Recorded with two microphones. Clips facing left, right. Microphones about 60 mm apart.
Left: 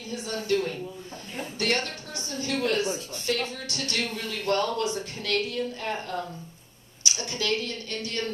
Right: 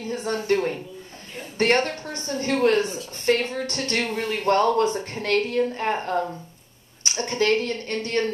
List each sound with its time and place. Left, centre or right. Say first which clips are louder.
0.0 s a woman's voice: right 6 dB; right